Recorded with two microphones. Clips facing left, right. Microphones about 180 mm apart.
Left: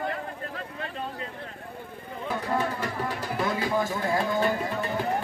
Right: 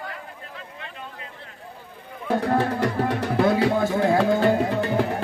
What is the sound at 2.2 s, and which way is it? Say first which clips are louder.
Music: right 6 dB; 70° right (ahead or behind).